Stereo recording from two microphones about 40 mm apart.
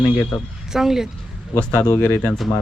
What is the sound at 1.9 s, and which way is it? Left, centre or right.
Speech, left.